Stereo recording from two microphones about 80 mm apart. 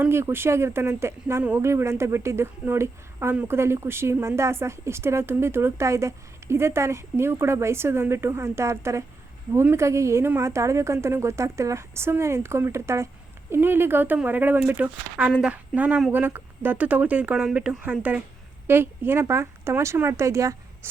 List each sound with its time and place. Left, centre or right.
0.1 s a woman's voice: right
13.5 s speech: right; by 15.5 s centre
15.5 s speech: right
18.7 s a woman's voice: right